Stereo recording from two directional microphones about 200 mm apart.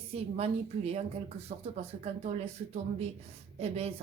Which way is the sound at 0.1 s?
30° right (ahead or behind).